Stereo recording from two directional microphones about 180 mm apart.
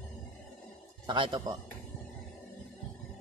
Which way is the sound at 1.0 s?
25° right (ahead or behind).